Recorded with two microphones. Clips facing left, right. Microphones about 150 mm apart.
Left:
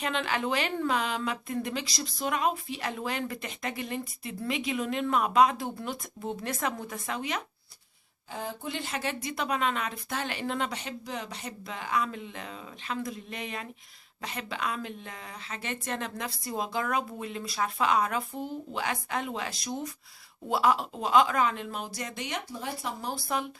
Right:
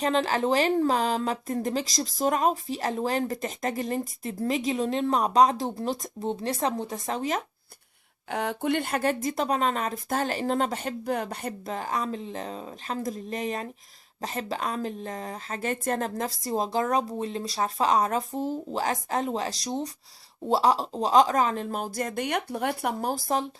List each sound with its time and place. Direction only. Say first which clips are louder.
0.0 s speech: right 6 dB; 35° right (ahead or behind)
8.3 s speech: right 9 dB; 70° right (ahead or behind); by 23.2 s 45° right (ahead or behind)